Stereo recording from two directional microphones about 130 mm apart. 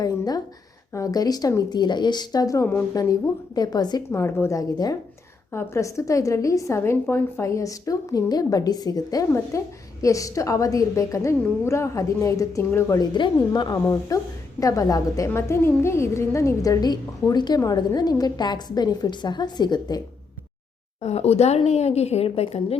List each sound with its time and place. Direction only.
0.0 s a woman's voice: 30° left (ahead or behind)
21.0 s a woman's voice: 55° left (ahead or behind)